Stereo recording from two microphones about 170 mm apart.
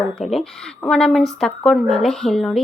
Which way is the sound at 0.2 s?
Centre (ahead or behind).